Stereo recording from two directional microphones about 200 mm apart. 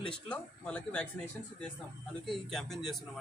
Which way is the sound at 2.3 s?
Centre (ahead or behind).